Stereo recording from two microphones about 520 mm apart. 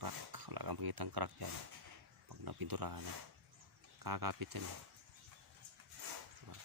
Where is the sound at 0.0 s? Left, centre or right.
Right.